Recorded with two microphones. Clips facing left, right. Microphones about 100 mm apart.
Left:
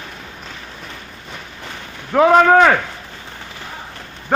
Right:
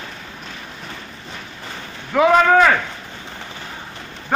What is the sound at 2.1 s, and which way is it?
Speech, 25° left (ahead or behind).